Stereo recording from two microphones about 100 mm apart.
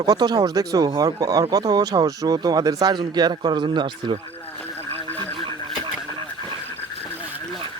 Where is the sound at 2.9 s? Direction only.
50° right (ahead or behind).